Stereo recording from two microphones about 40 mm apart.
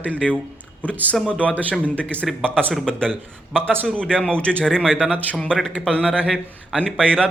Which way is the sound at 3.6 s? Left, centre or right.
Right.